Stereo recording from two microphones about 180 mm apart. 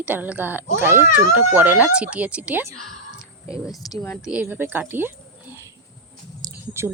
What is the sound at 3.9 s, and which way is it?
Speech, 10° left (ahead or behind).